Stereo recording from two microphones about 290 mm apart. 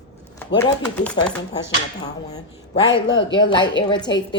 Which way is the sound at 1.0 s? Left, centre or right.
Centre.